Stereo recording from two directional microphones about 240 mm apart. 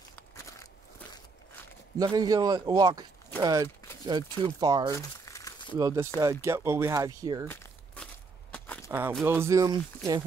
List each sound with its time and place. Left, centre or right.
0.1 s biting: centre
2.0 s speech: centre
4.9 s crumpling: centre
5.8 s speech: centre
7.4 s a sound: centre
9.2 s speech: centre